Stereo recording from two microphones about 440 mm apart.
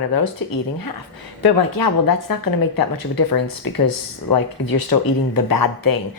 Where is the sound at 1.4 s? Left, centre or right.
Left.